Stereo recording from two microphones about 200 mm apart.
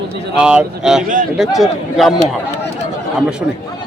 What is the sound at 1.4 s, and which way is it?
Speech, centre (ahead or behind).